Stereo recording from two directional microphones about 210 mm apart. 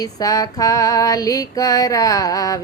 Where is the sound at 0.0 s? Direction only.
15° left (ahead or behind).